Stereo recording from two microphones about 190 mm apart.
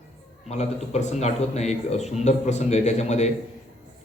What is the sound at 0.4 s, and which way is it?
Speech, 35° left (ahead or behind).